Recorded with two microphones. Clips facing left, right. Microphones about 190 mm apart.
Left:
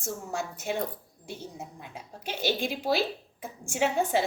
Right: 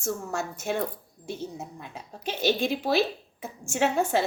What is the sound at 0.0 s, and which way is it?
A woman's voice, 15° left (ahead or behind).